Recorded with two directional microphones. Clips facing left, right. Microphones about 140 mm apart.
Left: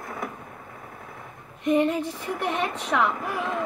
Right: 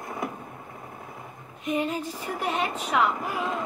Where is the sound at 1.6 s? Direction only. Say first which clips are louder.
Left 6 dB; 5° right (ahead or behind).